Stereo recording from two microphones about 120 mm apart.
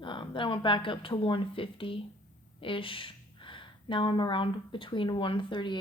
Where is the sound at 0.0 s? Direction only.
45° left (ahead or behind).